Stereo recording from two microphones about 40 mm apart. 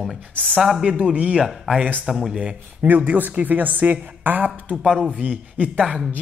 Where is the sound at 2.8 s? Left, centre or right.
Right.